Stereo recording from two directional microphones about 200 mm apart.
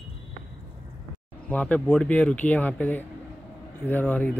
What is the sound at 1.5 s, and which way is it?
Speech, 5° left (ahead or behind).